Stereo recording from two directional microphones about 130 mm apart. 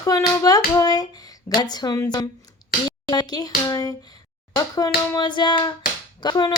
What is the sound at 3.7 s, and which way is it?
Speech, 30° left (ahead or behind).